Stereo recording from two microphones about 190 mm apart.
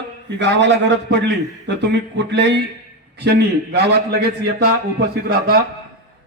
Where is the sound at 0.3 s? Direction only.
70° right (ahead or behind).